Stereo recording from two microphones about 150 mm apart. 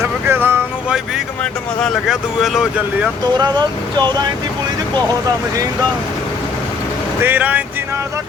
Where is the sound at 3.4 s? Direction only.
30° right (ahead or behind).